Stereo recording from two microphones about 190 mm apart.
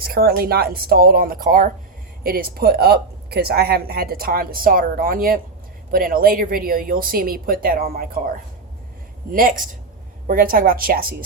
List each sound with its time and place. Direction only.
0.0 s speech: 50° right (ahead or behind)
9.3 s speech: 45° right (ahead or behind)